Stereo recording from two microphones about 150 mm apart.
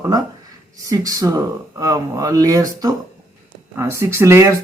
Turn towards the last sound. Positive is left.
turn(degrees=-20)  # may be behind; listen again after turning